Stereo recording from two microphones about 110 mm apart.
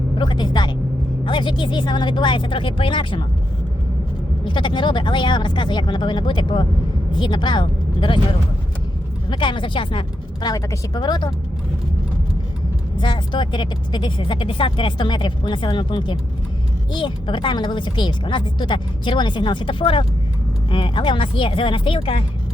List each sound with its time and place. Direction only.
0.2 s vehicle: 45° left (ahead or behind)
1.2 s speech: 45° left (ahead or behind)
4.4 s speech: 45° left (ahead or behind)
10.4 s speech: 35° left (ahead or behind)
13.0 s speech: 45° left (ahead or behind)